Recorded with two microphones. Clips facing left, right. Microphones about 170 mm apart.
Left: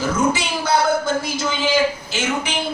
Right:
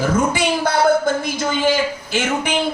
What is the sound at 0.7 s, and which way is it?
A woman's voice, 55° right (ahead or behind).